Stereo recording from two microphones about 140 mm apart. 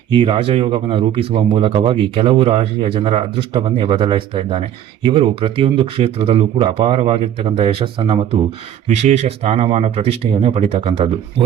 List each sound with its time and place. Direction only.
0.1 s speech: 40° right (ahead or behind)
8.9 s speech: 55° right (ahead or behind)